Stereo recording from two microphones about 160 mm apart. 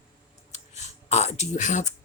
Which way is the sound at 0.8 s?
45° left (ahead or behind).